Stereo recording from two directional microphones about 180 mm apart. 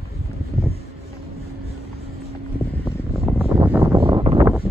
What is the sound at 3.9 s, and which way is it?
Vehicle, 30° right (ahead or behind).